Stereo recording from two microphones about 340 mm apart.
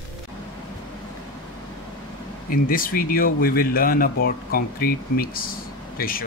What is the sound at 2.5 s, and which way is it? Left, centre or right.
Speech, left.